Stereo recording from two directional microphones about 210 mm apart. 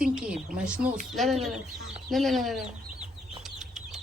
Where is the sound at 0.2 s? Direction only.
5° right (ahead or behind).